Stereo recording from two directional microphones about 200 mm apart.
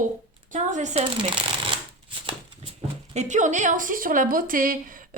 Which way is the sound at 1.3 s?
25° right (ahead or behind).